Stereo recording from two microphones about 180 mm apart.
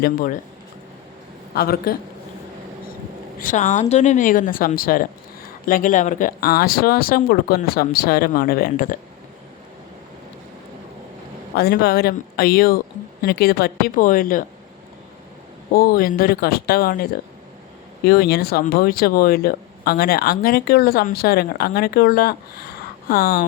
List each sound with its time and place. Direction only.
0.0 s speech: 50° left (ahead or behind)
1.5 s speech: 55° left (ahead or behind)
3.4 s speech: 45° left (ahead or behind)
11.5 s speech: 60° left (ahead or behind)
15.7 s speech: 55° left (ahead or behind)